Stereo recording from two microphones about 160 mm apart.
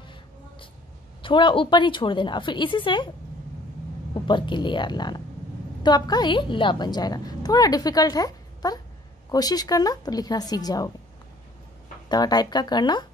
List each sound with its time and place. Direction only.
1.2 s a woman's voice: 30° left (ahead or behind)
4.1 s a woman's voice: 30° left (ahead or behind)
12.1 s a woman's voice: 25° left (ahead or behind)